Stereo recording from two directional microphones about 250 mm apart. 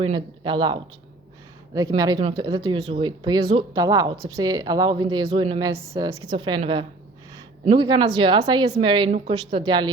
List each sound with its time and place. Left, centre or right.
0.0 s a woman's voice: centre